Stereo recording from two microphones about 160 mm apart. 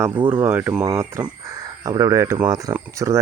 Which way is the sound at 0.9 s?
20° right (ahead or behind).